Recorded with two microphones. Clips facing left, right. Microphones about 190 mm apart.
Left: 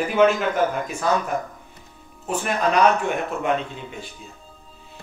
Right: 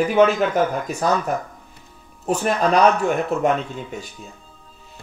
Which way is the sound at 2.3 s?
40° right (ahead or behind).